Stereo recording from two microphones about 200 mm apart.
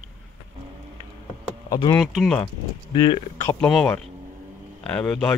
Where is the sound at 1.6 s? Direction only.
20° left (ahead or behind).